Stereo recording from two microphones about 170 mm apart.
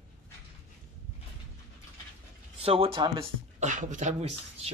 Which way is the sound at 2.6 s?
35° right (ahead or behind).